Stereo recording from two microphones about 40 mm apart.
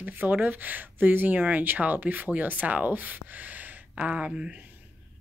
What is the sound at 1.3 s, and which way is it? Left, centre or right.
Speech, right.